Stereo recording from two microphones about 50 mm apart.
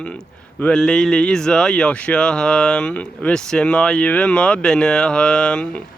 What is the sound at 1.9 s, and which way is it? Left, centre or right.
Speech, left.